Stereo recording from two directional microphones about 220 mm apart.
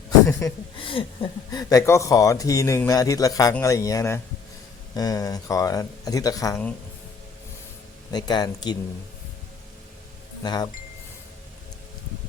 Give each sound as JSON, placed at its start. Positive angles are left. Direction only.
{"t": 0.3, "sound": "speech", "side_deg": 10}
{"t": 0.8, "sound": "speech", "side_deg": 25}
{"t": 8.1, "sound": "speech", "side_deg": 20}
{"t": 10.4, "sound": "speech", "side_deg": 20}